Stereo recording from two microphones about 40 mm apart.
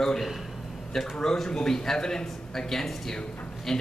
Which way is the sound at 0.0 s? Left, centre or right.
Centre.